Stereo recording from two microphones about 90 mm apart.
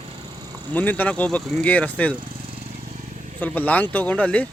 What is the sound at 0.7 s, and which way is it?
Speech, 20° left (ahead or behind).